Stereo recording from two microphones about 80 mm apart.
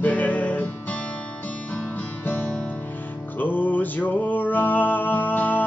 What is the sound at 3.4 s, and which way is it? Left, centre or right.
Music, left.